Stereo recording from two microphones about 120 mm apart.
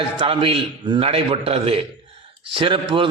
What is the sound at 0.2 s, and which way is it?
A man's voice, 50° right (ahead or behind).